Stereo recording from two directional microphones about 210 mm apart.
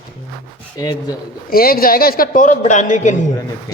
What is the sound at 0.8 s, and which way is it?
Speech, 20° left (ahead or behind).